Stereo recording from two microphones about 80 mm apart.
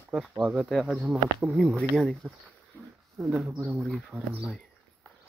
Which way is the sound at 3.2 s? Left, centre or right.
Centre.